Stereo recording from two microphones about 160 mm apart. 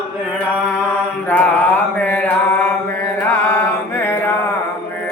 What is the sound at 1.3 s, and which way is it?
Mantra, 10° left (ahead or behind).